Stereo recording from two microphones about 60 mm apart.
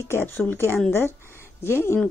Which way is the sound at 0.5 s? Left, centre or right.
Left.